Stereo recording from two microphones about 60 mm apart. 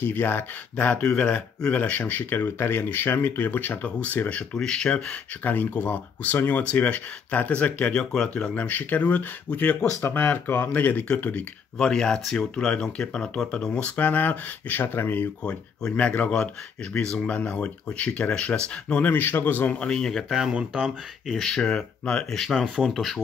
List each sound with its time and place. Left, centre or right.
0.0 s speech: left
1.0 s speech: centre
4.6 s speech: centre
5.4 s speech: left
8.0 s speech: centre
8.5 s speech: left
10.0 s speech: left
11.8 s speech: centre; by 15.2 s left
15.4 s speech: centre
19.8 s speech: centre
20.2 s speech: centre